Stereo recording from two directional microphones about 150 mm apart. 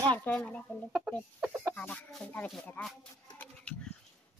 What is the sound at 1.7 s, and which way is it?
Speech, 10° left (ahead or behind).